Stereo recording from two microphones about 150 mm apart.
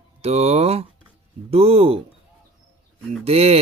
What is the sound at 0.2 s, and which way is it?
Speech, 45° right (ahead or behind).